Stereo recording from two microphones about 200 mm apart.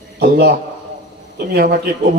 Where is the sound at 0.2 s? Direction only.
50° right (ahead or behind).